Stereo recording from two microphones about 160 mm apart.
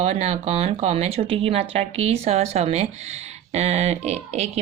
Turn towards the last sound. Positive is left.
turn(degrees=-45)  # may be behind; listen again after turning